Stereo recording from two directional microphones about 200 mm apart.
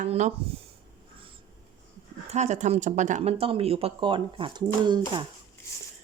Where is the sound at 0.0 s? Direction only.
35° right (ahead or behind).